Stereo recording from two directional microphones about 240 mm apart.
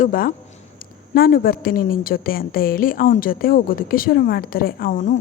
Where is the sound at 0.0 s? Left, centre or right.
Left.